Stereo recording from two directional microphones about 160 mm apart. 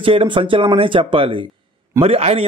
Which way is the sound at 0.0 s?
35° right (ahead or behind).